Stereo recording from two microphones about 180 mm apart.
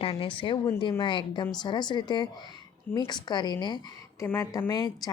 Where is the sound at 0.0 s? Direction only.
30° left (ahead or behind).